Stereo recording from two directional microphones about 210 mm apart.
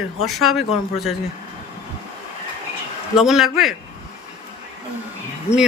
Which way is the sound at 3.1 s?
Centre (ahead or behind).